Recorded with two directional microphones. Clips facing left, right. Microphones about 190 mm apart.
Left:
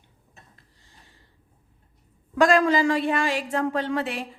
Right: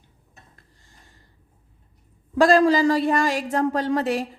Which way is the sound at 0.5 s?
45° right (ahead or behind).